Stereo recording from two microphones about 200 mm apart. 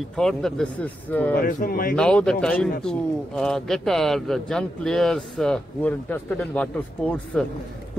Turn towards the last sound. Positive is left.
turn(degrees=5)  # may be behind; listen again after turning